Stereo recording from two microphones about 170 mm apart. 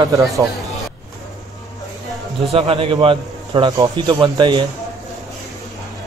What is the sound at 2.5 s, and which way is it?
A man's voice, 35° right (ahead or behind).